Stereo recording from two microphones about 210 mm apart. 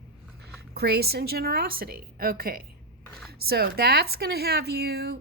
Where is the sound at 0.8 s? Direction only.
50° right (ahead or behind).